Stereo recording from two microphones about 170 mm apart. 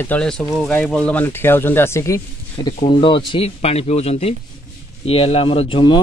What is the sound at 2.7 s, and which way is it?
Speech, 35° left (ahead or behind).